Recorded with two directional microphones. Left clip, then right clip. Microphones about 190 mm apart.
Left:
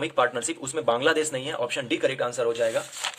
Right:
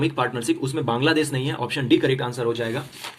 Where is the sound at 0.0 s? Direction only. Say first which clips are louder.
Even; 30° left (ahead or behind).